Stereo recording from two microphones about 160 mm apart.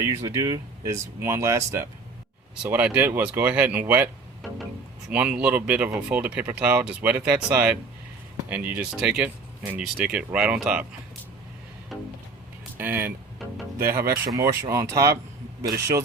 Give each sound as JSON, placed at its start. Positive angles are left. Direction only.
{"t": 0.0, "sound": "speech", "side_deg": -20}
{"t": 11.9, "sound": "music", "side_deg": 0}
{"t": 12.7, "sound": "speech", "side_deg": -10}
{"t": 13.8, "sound": "speech", "side_deg": -65}
{"t": 14.3, "sound": "speech", "side_deg": -15}